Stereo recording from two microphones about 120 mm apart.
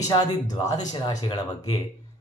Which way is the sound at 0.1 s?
35° left (ahead or behind).